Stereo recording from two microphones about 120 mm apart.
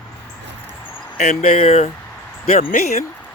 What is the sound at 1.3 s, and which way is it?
Speech, 70° left (ahead or behind).